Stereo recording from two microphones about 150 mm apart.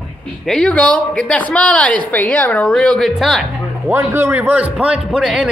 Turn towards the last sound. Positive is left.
turn(degrees=-5)  # may be behind; listen again after turning